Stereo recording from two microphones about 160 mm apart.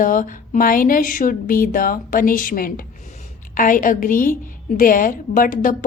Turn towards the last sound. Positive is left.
turn(degrees=55)  # may be behind; listen again after turning